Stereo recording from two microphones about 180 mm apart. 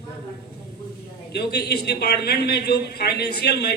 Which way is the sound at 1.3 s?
65° left (ahead or behind).